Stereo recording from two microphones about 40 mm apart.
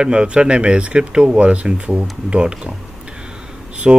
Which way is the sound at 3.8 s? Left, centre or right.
Centre.